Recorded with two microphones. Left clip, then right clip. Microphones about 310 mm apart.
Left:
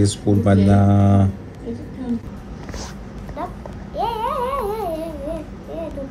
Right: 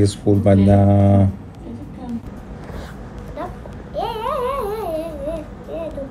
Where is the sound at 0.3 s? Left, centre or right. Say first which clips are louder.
Right 3 dB; right.